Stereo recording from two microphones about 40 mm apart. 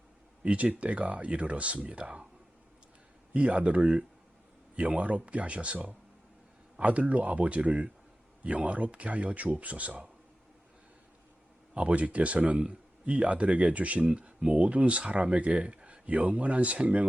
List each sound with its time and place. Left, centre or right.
0.4 s a man's voice: right
3.3 s a man's voice: right
11.7 s a man's voice: right